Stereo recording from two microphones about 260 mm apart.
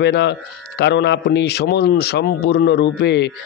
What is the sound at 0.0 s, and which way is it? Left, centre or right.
A man's voice, left.